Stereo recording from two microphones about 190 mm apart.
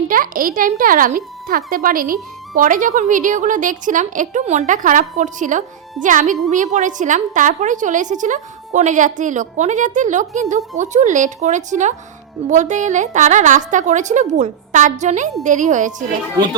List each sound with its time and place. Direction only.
0.1 s a woman's voice: 45° right (ahead or behind)